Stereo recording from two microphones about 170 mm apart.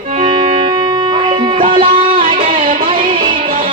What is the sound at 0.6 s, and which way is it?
Music, 30° right (ahead or behind).